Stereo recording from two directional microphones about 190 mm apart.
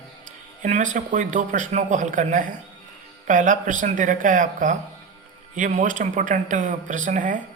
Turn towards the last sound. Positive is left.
turn(degrees=-45)  # may be behind; listen again after turning